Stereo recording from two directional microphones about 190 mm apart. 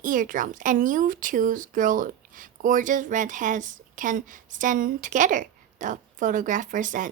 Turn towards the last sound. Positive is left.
turn(degrees=-45)  # may be behind; listen again after turning